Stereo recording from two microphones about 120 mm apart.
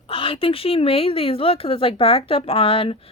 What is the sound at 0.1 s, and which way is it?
Speech, 50° left (ahead or behind).